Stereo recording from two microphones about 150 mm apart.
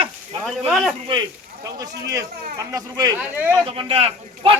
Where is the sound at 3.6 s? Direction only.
40° right (ahead or behind).